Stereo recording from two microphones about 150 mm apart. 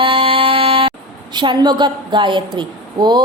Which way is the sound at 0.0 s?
35° right (ahead or behind).